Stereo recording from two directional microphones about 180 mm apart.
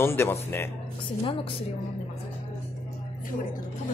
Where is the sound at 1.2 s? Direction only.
30° left (ahead or behind).